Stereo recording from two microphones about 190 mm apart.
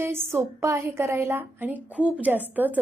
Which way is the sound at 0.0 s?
10° right (ahead or behind).